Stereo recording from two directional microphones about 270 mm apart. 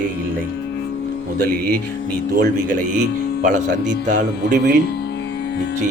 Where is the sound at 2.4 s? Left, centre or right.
Right.